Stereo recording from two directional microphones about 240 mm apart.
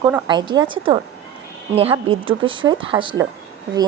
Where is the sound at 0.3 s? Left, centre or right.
Centre.